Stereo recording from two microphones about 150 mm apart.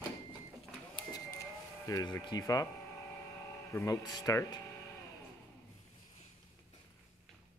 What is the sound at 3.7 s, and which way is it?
Speech, 20° left (ahead or behind).